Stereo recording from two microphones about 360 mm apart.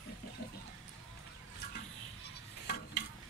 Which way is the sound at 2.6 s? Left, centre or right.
Left.